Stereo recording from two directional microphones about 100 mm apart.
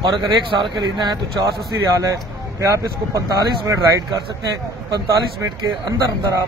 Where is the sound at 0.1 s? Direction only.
50° right (ahead or behind).